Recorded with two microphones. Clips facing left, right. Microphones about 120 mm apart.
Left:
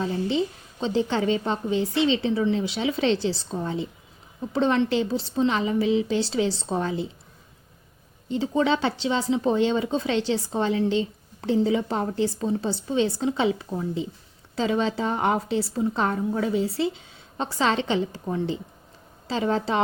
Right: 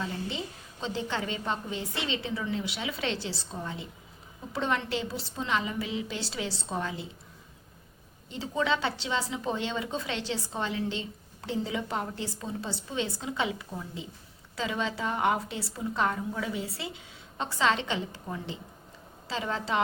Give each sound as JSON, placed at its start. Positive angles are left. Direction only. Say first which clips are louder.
{"t": 0.0, "sound": "a woman's voice", "louder": "left 10 dB", "side_deg": 30}
{"t": 8.3, "sound": "a woman's voice", "louder": "left 7 dB", "side_deg": 30}